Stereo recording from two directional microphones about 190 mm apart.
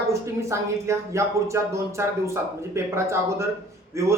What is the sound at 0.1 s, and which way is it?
Speech, 15° right (ahead or behind).